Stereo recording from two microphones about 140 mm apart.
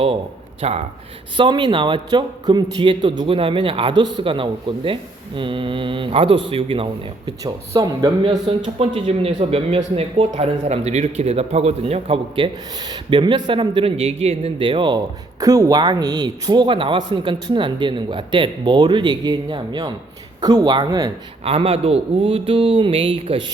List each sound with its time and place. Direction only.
0.6 s speech: 50° right (ahead or behind)
1.4 s a man's voice: 35° right (ahead or behind)
7.4 s a man's voice: 25° right (ahead or behind); by 12.5 s 45° right (ahead or behind)
12.8 s a man's voice: 35° right (ahead or behind)
21.4 s a man's voice: 45° right (ahead or behind)